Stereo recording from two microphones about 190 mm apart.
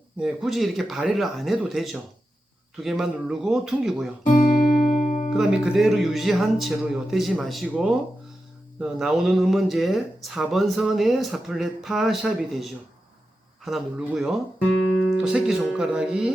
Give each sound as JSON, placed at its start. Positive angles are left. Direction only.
{"t": 0.2, "sound": "speech", "side_deg": 0}
{"t": 4.5, "sound": "music", "side_deg": 35}
{"t": 5.3, "sound": "speech", "side_deg": 0}